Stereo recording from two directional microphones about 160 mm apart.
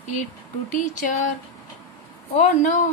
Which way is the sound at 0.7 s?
50° left (ahead or behind).